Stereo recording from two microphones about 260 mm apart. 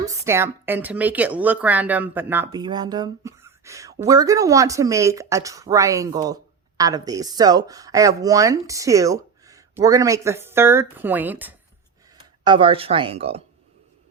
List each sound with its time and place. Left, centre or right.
0.3 s speech: centre
12.5 s speech: centre